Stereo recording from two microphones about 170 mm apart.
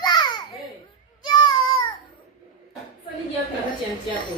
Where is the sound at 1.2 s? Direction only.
25° left (ahead or behind).